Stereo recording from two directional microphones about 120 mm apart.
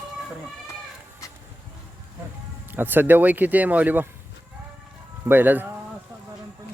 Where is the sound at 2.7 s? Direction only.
15° right (ahead or behind).